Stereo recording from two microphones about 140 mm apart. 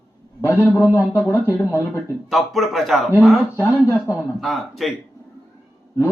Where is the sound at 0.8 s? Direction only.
20° left (ahead or behind).